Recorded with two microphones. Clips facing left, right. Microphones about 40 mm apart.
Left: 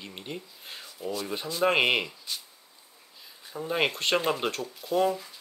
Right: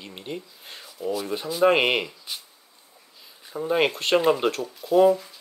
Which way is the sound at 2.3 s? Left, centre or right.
Centre.